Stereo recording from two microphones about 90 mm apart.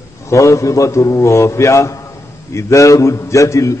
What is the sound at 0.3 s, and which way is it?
A man's voice, 35° left (ahead or behind).